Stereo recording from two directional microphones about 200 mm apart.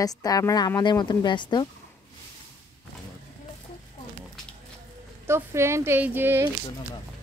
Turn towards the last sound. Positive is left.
turn(degrees=-10)  # may be behind; listen again after turning